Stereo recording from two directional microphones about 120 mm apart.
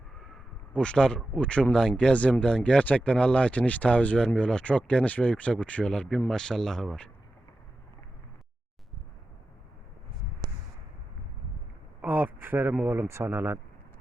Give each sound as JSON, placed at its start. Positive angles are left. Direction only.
{"t": 0.7, "sound": "speech", "side_deg": 10}
{"t": 12.0, "sound": "speech", "side_deg": -15}